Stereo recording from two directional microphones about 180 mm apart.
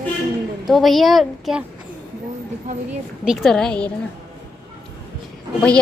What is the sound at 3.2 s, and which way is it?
Speech, centre (ahead or behind).